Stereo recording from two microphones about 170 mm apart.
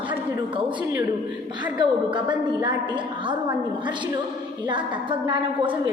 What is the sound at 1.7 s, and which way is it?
Speech, 25° right (ahead or behind).